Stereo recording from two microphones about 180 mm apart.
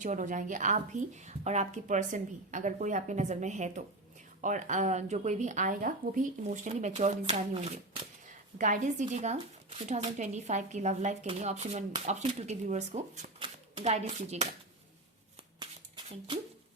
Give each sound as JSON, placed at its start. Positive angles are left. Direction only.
{"t": 0.0, "sound": "a woman's voice", "side_deg": -45}
{"t": 16.0, "sound": "speech", "side_deg": -30}